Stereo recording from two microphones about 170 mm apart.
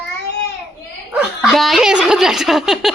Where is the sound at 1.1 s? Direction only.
Centre (ahead or behind).